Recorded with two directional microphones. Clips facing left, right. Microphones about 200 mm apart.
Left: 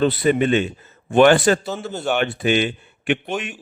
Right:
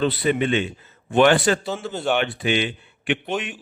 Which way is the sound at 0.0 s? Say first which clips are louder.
Left 3 dB; 45° left (ahead or behind).